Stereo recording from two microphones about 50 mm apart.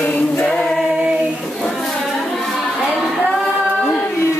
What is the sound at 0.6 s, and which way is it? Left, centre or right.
Choir, centre.